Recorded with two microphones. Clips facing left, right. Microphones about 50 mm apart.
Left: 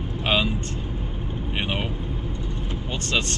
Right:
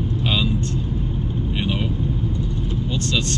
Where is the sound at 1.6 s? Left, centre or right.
Left.